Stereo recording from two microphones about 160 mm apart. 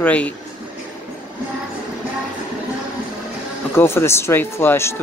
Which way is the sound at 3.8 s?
15° left (ahead or behind).